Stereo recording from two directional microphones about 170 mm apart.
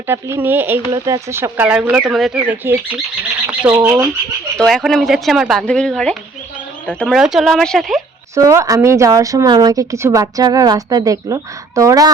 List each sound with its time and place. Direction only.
0.1 s speech: 15° right (ahead or behind)
4.5 s speech: centre (ahead or behind)
8.4 s a woman's voice: 20° right (ahead or behind)